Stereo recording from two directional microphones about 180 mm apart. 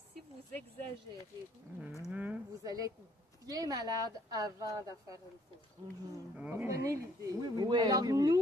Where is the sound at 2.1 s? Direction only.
10° right (ahead or behind).